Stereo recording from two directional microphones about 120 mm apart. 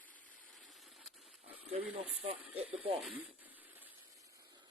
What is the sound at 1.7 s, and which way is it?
Speech, 55° right (ahead or behind).